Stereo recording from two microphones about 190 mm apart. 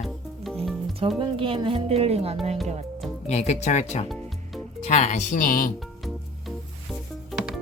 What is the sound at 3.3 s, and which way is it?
Speech, 35° left (ahead or behind).